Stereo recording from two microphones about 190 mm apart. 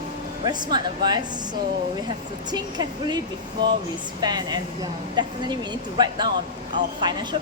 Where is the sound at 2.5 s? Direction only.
20° right (ahead or behind).